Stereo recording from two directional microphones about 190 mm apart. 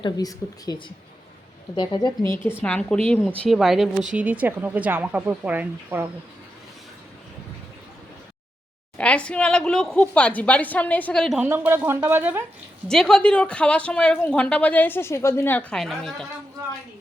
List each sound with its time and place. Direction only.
0.0 s a woman's voice: 20° left (ahead or behind); by 6.1 s 10° right (ahead or behind)
9.0 s a woman's voice: 5° left (ahead or behind)
11.3 s a woman's voice: 10° right (ahead or behind)
12.9 s a woman's voice: 5° left (ahead or behind)